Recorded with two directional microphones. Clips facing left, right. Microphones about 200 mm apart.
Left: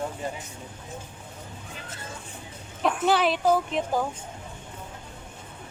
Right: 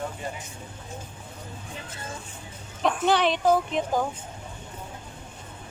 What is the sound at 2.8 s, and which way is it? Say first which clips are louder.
Speech: even; 5° left (ahead or behind).